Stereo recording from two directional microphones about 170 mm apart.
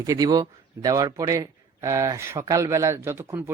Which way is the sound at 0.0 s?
20° right (ahead or behind).